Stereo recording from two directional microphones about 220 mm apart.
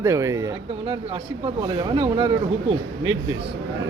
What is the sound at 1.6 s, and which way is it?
Speech, 20° right (ahead or behind).